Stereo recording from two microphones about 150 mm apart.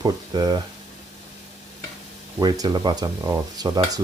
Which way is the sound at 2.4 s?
30° right (ahead or behind).